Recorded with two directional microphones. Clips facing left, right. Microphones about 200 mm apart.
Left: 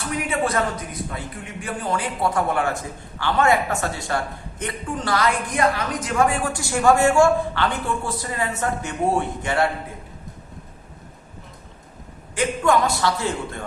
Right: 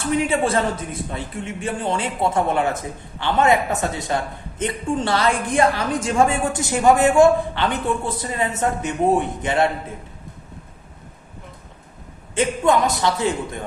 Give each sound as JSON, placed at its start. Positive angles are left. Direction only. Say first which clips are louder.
{"t": 0.0, "sound": "a man's voice", "louder": "right 4 dB", "side_deg": -30}
{"t": 12.3, "sound": "a man's voice", "louder": "right 2 dB", "side_deg": -20}